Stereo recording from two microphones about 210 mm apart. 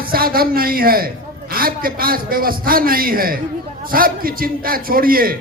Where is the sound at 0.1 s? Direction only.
45° right (ahead or behind).